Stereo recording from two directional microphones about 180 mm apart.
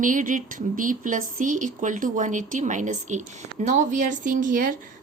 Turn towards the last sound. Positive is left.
turn(degrees=-45)  # may be behind; listen again after turning